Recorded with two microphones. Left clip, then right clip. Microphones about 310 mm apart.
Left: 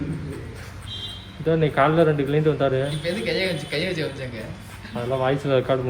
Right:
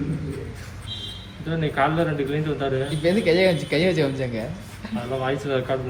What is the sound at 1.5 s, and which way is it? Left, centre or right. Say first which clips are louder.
Speech: left 4 dB; left.